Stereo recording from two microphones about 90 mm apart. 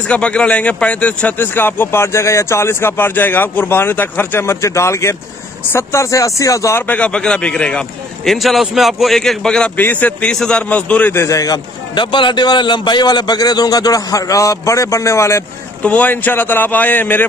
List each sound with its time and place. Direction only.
0.1 s a man's voice: 10° left (ahead or behind); by 6.8 s 35° left (ahead or behind)
6.9 s a man's voice: 15° left (ahead or behind)
8.3 s a man's voice: centre (ahead or behind)
9.8 s a man's voice: 20° left (ahead or behind)
11.1 s speech: 35° left (ahead or behind)
11.9 s a man's voice: 60° left (ahead or behind); by 15.4 s 30° left (ahead or behind)
15.8 s a man's voice: 15° left (ahead or behind)